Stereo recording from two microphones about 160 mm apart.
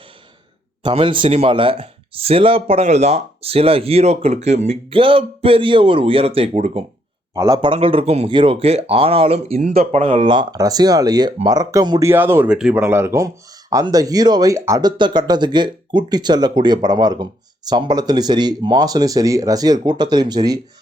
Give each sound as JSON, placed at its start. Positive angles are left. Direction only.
{"t": 0.8, "sound": "speech", "side_deg": -30}
{"t": 7.3, "sound": "speech", "side_deg": -25}